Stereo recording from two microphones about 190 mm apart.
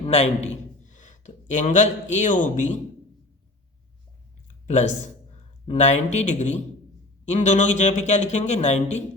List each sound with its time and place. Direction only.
0.0 s a man's voice: 35° left (ahead or behind)
4.4 s a sound: 40° left (ahead or behind)
5.6 s speech: 35° left (ahead or behind)